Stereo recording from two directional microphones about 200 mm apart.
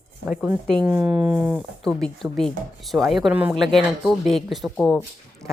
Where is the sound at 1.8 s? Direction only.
5° left (ahead or behind).